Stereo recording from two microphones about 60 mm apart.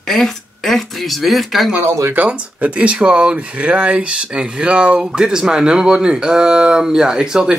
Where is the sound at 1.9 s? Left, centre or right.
Right.